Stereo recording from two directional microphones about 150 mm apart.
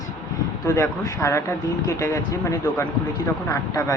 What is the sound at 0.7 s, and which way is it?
Speech, 20° left (ahead or behind).